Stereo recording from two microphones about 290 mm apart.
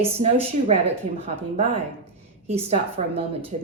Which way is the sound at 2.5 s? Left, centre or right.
Right.